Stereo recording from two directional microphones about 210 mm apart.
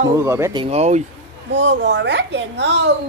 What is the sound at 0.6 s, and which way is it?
Speech, 30° right (ahead or behind).